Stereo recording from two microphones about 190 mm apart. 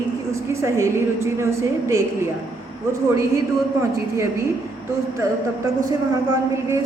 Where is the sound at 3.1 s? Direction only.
15° right (ahead or behind).